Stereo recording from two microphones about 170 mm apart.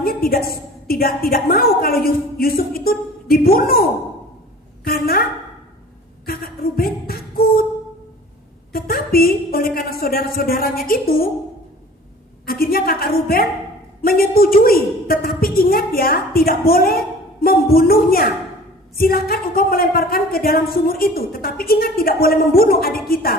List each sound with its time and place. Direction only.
0.0 s a woman's voice: 60° left (ahead or behind)
6.2 s a sound: 60° left (ahead or behind)
8.7 s a woman's voice: 60° left (ahead or behind)
12.5 s a woman's voice: 60° left (ahead or behind)